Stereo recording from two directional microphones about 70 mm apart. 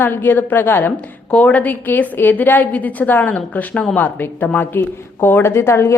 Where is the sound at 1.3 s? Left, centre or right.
Centre.